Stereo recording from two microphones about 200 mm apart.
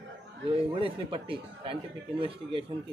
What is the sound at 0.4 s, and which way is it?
A man's voice, 25° right (ahead or behind).